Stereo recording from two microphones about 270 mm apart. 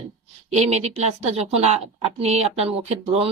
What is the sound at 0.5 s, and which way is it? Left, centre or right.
A woman's voice, right.